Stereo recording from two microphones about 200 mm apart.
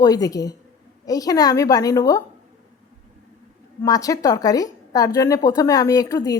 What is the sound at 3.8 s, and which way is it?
A woman's voice, 20° left (ahead or behind).